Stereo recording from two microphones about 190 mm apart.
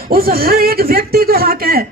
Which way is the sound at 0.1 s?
50° right (ahead or behind).